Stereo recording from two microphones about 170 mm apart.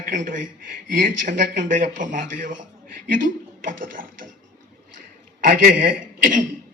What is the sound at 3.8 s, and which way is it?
Speech, 55° right (ahead or behind).